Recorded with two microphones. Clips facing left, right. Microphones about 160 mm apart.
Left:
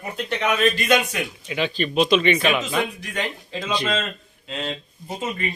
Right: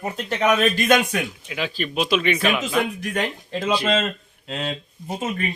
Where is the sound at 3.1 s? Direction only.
50° right (ahead or behind).